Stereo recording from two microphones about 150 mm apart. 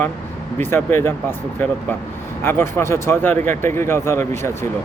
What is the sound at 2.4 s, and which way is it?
Speech, 15° left (ahead or behind).